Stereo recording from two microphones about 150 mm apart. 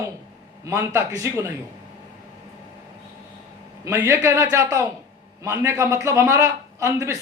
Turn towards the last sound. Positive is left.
turn(degrees=-20)  # may be behind; listen again after turning